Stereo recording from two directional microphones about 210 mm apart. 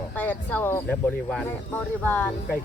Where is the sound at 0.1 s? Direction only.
10° left (ahead or behind).